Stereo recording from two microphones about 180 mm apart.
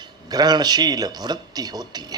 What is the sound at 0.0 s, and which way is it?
Speech, 20° right (ahead or behind).